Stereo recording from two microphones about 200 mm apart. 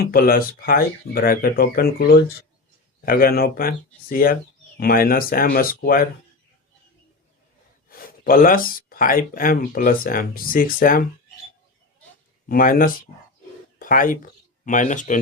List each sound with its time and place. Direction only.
0.0 s speech: 45° left (ahead or behind)
3.1 s speech: 45° left (ahead or behind)
7.9 s speech: 45° left (ahead or behind)
12.5 s speech: 45° left (ahead or behind)